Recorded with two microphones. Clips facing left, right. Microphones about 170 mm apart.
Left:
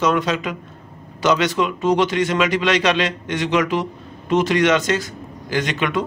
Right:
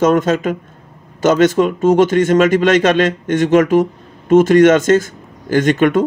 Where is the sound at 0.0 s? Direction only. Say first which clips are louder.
Right 6 dB; 50° right (ahead or behind).